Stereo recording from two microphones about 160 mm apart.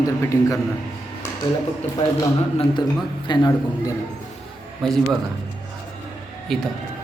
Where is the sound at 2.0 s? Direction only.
45° left (ahead or behind).